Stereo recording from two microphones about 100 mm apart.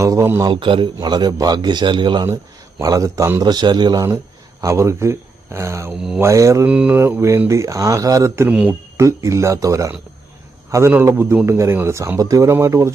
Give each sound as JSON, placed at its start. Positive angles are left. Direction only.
{"t": 0.0, "sound": "speech", "side_deg": -30}
{"t": 0.4, "sound": "a man's voice", "side_deg": -55}
{"t": 1.0, "sound": "a man's voice", "side_deg": -45}
{"t": 2.8, "sound": "a man's voice", "side_deg": -35}
{"t": 4.6, "sound": "speech", "side_deg": -30}
{"t": 6.7, "sound": "mantra", "side_deg": -15}
{"t": 7.0, "sound": "speech", "side_deg": -25}
{"t": 8.4, "sound": "mantra", "side_deg": -10}
{"t": 9.0, "sound": "speech", "side_deg": -30}